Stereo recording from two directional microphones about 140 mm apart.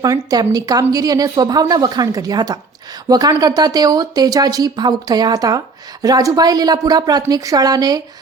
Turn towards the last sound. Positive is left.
turn(degrees=-25)  # may be behind; listen again after turning